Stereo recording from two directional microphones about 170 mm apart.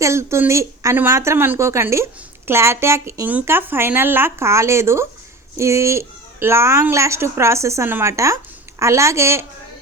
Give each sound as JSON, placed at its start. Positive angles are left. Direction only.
{"t": 0.0, "sound": "speech", "side_deg": -15}